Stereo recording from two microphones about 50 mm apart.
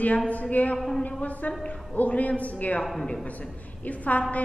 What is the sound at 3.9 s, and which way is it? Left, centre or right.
Speech, left.